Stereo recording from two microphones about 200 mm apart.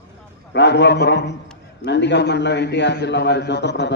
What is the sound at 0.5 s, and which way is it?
A man's voice, 60° left (ahead or behind).